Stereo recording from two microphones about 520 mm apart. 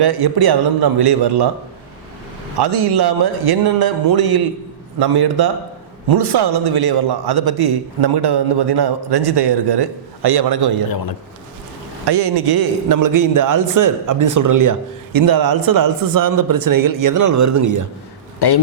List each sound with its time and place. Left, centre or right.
0.0 s a man's voice: right
2.6 s a man's voice: right
12.0 s a man's voice: right
18.3 s a man's voice: left